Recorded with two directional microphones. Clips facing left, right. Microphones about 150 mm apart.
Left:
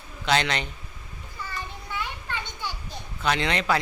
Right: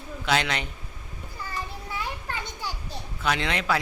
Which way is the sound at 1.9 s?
35° right (ahead or behind).